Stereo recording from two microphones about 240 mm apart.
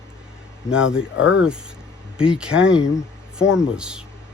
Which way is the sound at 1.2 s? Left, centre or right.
Left.